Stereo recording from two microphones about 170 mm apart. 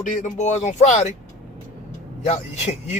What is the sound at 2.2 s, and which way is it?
Speech, 45° left (ahead or behind).